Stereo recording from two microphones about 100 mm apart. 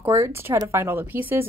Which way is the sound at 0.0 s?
30° right (ahead or behind).